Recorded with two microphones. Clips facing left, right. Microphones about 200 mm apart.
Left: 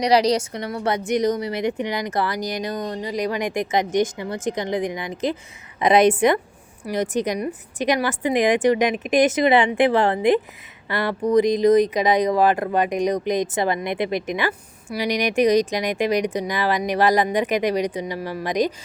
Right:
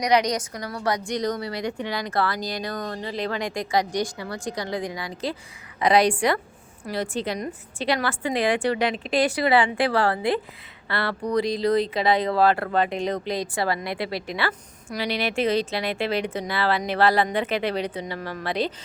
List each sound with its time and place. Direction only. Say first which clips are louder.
0.0 s a woman's voice: left 4 dB; 30° left (ahead or behind); by 18.7 s 15° left (ahead or behind)